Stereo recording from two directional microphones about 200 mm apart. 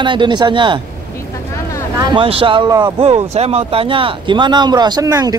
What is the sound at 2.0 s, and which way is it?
Speech, 25° right (ahead or behind).